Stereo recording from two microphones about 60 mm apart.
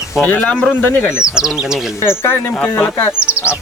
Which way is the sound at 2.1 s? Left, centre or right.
Left.